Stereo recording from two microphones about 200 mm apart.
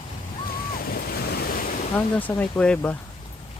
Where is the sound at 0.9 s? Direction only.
50° left (ahead or behind).